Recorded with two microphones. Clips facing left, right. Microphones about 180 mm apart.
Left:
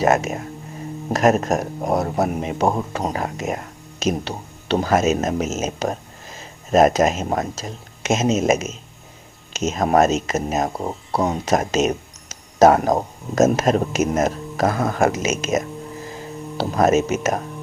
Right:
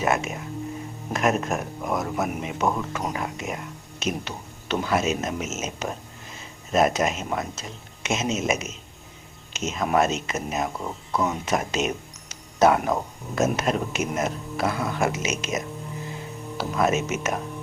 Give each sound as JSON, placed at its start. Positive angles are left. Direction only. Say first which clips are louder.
{"t": 0.0, "sound": "speech", "louder": "left 6 dB", "side_deg": 40}
{"t": 4.2, "sound": "speech", "louder": "left 5 dB", "side_deg": 30}